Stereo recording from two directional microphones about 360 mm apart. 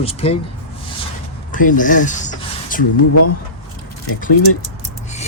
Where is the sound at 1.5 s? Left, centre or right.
Left.